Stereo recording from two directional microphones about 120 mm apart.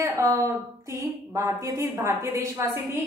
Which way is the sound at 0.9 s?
25° right (ahead or behind).